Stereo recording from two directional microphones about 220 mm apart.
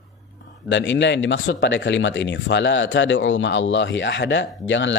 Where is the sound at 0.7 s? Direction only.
55° left (ahead or behind).